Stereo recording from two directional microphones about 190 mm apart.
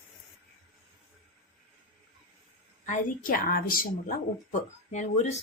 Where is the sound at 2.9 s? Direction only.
45° left (ahead or behind).